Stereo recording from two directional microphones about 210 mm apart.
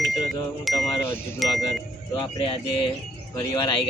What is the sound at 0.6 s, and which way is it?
Speech, centre (ahead or behind).